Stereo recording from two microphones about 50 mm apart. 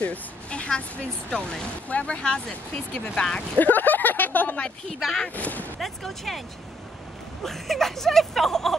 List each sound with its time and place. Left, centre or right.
0.0 s speech: left
3.5 s speech: left
4.8 s speech: centre
5.3 s speech: left
5.8 s speech: centre
7.4 s speech: centre